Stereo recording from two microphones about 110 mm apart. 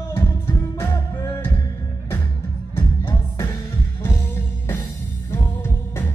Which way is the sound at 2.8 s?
20° left (ahead or behind).